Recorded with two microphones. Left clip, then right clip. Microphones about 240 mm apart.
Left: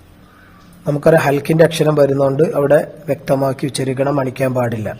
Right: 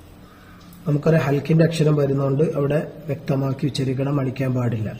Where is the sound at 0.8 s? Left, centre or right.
Left.